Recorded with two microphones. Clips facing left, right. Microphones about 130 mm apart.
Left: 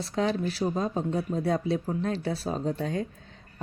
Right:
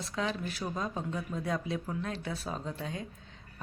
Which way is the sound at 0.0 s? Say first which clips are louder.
Left 7 dB; 35° left (ahead or behind).